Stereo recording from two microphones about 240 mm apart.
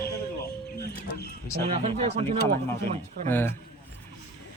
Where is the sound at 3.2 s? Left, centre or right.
Centre.